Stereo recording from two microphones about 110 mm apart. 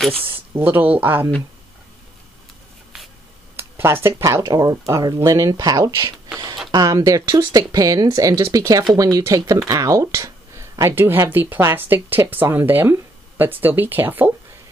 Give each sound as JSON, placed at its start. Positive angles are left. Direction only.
{"t": 0.1, "sound": "speech", "side_deg": -55}
{"t": 0.6, "sound": "speech", "side_deg": -15}
{"t": 3.5, "sound": "speech", "side_deg": -20}